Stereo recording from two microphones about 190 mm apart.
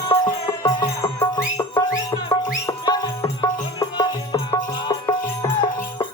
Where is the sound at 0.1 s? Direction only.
15° left (ahead or behind).